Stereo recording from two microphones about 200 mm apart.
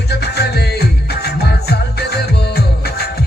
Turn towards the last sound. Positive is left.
turn(degrees=55)  # may be behind; listen again after turning